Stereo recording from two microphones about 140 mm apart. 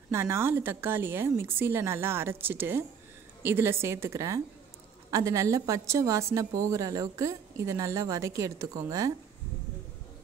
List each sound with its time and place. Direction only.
0.1 s a woman's voice: 20° right (ahead or behind)